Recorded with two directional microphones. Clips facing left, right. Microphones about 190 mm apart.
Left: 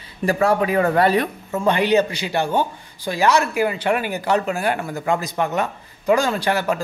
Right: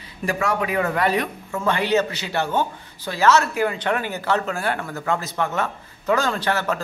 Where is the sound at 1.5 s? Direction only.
15° left (ahead or behind).